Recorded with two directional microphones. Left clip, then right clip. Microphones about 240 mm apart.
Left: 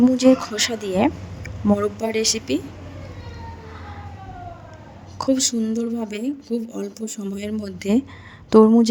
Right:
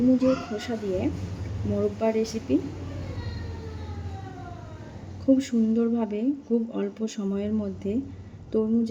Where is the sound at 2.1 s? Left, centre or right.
Left.